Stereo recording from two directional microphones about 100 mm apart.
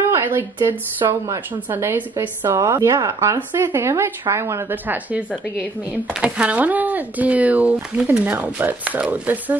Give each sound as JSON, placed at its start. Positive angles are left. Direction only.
{"t": 0.1, "sound": "a woman's voice", "side_deg": -20}
{"t": 4.8, "sound": "speech", "side_deg": -15}